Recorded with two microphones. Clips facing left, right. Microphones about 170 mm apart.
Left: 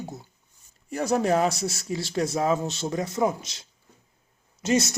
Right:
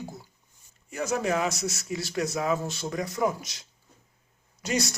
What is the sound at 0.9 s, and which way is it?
Speech, 35° left (ahead or behind).